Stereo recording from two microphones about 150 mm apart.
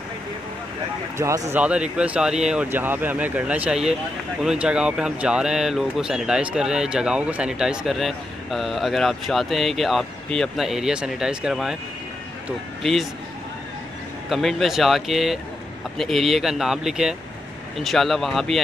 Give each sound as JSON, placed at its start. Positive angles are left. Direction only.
{"t": 1.1, "sound": "speech", "side_deg": -20}
{"t": 1.6, "sound": "speech", "side_deg": -5}
{"t": 14.3, "sound": "speech", "side_deg": 0}